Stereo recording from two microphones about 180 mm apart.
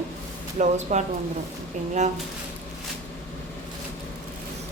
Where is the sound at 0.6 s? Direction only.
40° right (ahead or behind).